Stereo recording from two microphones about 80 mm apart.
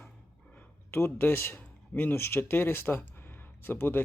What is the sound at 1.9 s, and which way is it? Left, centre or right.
Speech, left.